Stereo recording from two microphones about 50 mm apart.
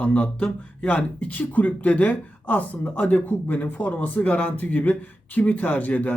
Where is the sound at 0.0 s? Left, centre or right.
Left.